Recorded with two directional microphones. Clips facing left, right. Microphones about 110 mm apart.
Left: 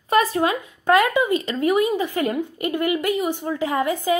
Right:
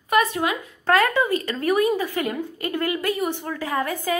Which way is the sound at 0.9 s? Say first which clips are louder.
Left 2 dB; 15° left (ahead or behind).